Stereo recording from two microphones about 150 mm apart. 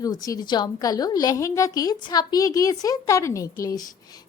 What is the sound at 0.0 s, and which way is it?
A woman's voice, 25° left (ahead or behind).